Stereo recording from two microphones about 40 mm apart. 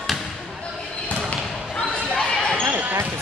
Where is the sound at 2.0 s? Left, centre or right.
Centre.